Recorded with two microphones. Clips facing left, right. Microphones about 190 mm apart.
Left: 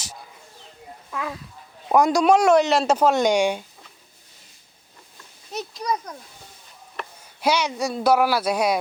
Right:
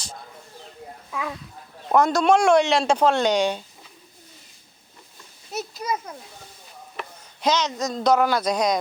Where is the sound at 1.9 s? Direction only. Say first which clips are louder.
Left 1 dB; 10° left (ahead or behind).